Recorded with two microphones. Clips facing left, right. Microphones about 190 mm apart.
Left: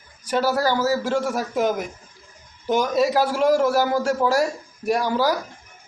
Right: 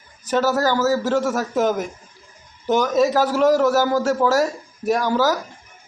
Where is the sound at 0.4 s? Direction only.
45° right (ahead or behind).